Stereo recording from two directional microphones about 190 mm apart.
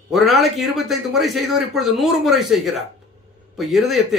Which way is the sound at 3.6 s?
Centre (ahead or behind).